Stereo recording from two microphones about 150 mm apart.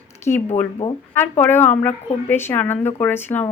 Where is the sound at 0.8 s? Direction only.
25° left (ahead or behind).